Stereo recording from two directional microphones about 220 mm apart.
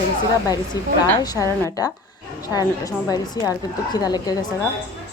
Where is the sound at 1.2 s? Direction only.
15° left (ahead or behind).